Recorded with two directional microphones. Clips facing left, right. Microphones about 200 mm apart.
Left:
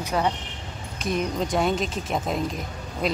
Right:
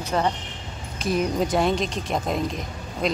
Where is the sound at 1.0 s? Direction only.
5° right (ahead or behind).